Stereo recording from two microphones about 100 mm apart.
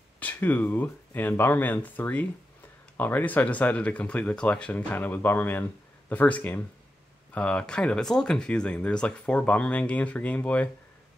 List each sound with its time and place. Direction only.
0.2 s speech: 20° left (ahead or behind)